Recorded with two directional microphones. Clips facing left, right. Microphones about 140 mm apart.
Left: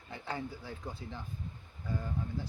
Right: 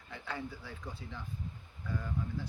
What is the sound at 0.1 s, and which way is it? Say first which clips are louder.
Speech: left 2 dB; 30° left (ahead or behind).